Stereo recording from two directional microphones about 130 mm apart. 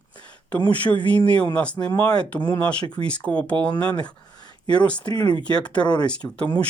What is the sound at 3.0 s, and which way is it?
Speech, 10° left (ahead or behind).